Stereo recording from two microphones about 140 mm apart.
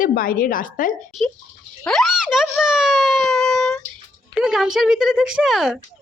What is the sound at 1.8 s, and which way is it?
A child's voice, centre (ahead or behind).